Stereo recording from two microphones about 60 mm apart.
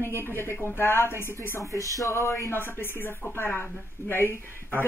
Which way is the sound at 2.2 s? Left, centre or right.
Left.